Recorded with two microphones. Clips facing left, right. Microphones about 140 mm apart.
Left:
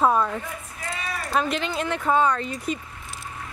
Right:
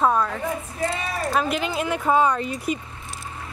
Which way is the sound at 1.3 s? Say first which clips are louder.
Even; 10° right (ahead or behind).